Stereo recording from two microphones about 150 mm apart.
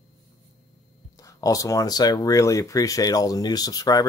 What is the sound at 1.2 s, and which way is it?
Speech, 20° left (ahead or behind).